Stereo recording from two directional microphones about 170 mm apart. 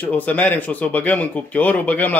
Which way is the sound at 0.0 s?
10° left (ahead or behind).